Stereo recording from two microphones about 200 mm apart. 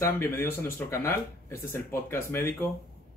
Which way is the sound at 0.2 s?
10° left (ahead or behind).